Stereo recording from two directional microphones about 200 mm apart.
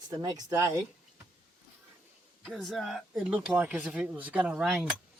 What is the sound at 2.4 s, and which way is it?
Speech, centre (ahead or behind).